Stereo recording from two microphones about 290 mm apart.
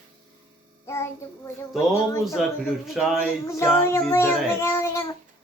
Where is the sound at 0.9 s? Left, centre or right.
Centre.